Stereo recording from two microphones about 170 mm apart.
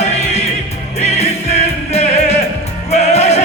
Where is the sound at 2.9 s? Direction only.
40° left (ahead or behind).